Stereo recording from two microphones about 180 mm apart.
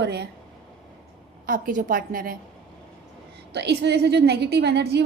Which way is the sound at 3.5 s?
70° right (ahead or behind).